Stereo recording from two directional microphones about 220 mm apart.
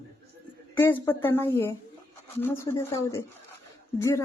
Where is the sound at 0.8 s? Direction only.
10° left (ahead or behind).